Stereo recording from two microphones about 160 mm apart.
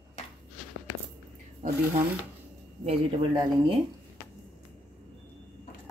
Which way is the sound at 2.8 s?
35° right (ahead or behind).